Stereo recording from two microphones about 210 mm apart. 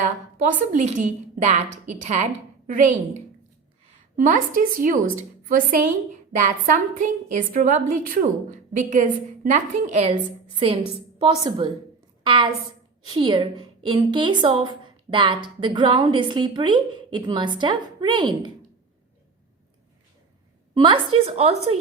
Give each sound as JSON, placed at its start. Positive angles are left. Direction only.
{"t": 0.7, "sound": "a woman's voice", "side_deg": -35}
{"t": 11.2, "sound": "a woman's voice", "side_deg": -20}
{"t": 20.7, "sound": "a woman's voice", "side_deg": -20}